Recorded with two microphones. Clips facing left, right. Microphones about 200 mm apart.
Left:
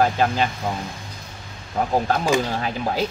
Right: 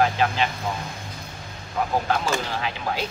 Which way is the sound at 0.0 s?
40° left (ahead or behind).